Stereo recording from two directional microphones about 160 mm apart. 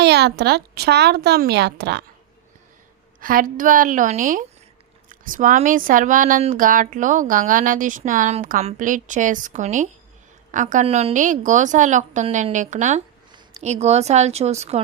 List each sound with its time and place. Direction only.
0.0 s speech: 90° right
3.2 s a woman's voice: 60° right (ahead or behind)
10.8 s a woman's voice: 40° right (ahead or behind)